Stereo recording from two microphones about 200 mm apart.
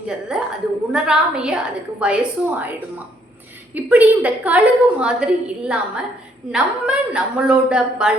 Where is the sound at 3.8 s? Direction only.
10° right (ahead or behind).